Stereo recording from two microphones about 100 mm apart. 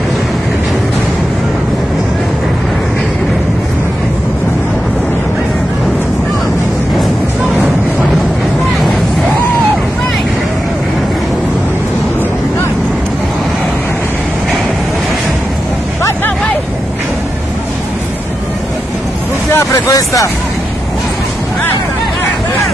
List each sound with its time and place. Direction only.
19.5 s vehicle: 35° left (ahead or behind)